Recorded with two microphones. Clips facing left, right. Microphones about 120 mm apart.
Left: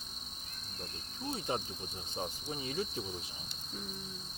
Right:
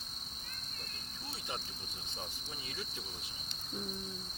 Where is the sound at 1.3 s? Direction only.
30° left (ahead or behind).